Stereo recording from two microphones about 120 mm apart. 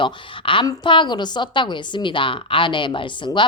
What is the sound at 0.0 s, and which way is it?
A woman's voice, 45° left (ahead or behind).